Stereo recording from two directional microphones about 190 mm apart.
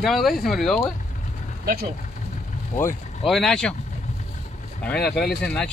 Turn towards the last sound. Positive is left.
turn(degrees=5)  # may be behind; listen again after turning